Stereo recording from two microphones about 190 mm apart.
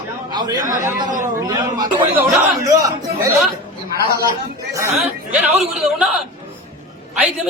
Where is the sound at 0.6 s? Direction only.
45° right (ahead or behind).